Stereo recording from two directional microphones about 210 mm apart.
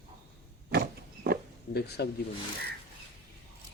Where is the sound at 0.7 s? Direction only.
45° right (ahead or behind).